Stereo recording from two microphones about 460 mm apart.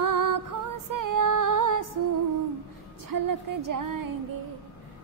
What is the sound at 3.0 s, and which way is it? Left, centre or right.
A woman's voice, right.